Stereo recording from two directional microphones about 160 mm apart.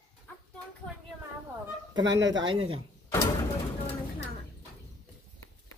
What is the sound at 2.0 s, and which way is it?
Speech, 30° right (ahead or behind).